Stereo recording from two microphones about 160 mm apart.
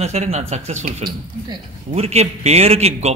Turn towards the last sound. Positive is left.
turn(degrees=-40)  # may be behind; listen again after turning